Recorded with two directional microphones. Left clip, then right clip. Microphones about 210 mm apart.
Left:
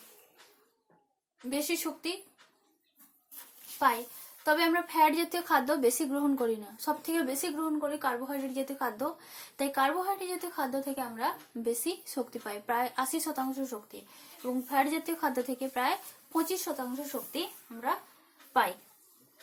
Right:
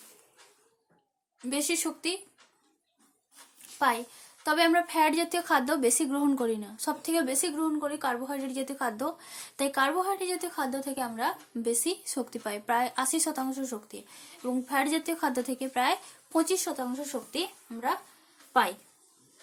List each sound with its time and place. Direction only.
1.5 s a woman's voice: 40° right (ahead or behind)
3.8 s a woman's voice: 40° right (ahead or behind)